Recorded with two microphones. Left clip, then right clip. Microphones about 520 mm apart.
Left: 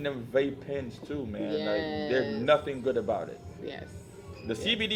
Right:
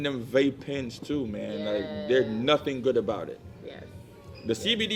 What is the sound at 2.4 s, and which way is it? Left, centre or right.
Speech, right.